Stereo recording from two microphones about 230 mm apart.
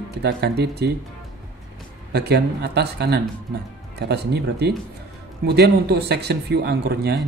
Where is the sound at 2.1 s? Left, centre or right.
Right.